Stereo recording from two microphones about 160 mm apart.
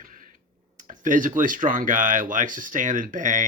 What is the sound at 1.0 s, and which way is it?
Speech, 55° right (ahead or behind).